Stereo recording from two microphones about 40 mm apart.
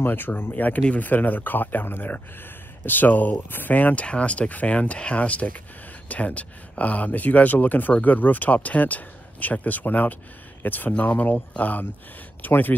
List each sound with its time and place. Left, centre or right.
0.0 s speech: left
0.4 s speech: left
3.7 s speech: left